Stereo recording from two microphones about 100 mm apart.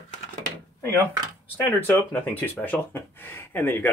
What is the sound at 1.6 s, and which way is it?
Speech, 20° left (ahead or behind).